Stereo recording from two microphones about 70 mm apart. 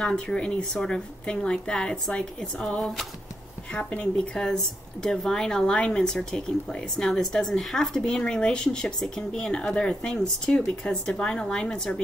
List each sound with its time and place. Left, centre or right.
0.0 s speech: centre